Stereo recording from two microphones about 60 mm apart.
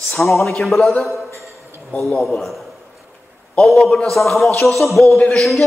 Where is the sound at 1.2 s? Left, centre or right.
Right.